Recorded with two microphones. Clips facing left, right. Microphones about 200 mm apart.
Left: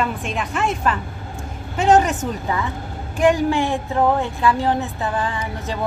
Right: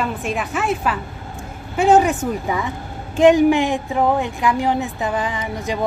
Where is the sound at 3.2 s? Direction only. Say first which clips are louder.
Right 5 dB; 20° right (ahead or behind).